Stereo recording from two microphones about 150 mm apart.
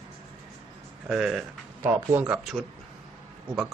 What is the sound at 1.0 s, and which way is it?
Speech, 5° right (ahead or behind).